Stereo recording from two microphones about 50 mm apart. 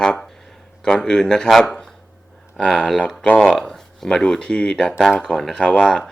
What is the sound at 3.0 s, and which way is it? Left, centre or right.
Speech, left.